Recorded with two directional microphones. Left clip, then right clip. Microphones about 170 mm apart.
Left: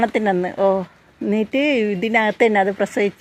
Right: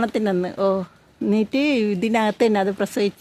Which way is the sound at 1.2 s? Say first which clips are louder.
Left 2 dB; 40° right (ahead or behind).